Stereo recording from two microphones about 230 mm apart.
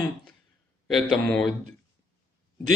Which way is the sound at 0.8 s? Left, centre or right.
Centre.